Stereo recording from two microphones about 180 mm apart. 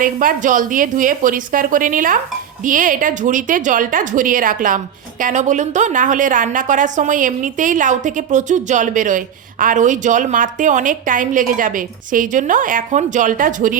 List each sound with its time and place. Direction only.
0.0 s a woman's voice: 50° right (ahead or behind)